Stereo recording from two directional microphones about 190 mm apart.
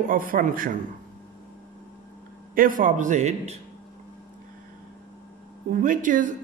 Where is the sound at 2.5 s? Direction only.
45° right (ahead or behind).